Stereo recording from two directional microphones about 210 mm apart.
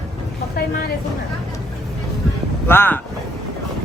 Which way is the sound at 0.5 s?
45° left (ahead or behind).